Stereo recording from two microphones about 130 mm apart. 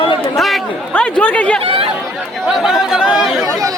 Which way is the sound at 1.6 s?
45° right (ahead or behind).